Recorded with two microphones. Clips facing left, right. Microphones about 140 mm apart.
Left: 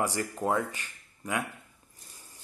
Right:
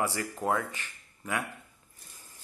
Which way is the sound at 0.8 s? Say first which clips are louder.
Even; 15° left (ahead or behind).